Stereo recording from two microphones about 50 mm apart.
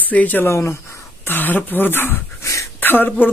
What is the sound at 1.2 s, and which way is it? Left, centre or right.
Speech, left.